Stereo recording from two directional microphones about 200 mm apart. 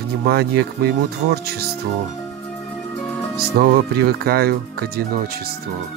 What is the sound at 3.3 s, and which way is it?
Speech, 50° right (ahead or behind).